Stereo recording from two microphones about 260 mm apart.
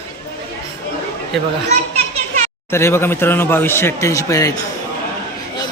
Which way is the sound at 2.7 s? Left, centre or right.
Centre.